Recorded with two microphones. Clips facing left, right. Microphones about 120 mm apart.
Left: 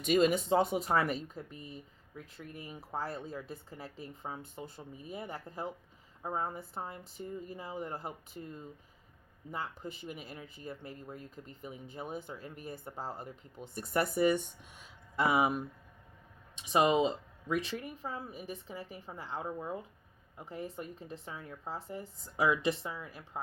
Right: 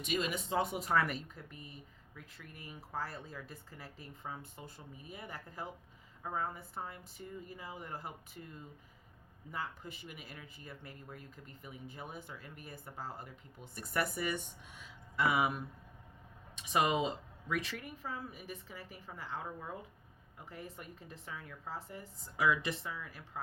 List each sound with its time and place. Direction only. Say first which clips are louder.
0.0 s speech: left 9 dB; 40° left (ahead or behind); by 23.4 s 25° left (ahead or behind)